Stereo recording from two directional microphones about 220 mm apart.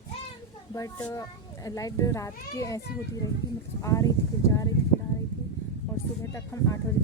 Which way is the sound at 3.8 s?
15° left (ahead or behind).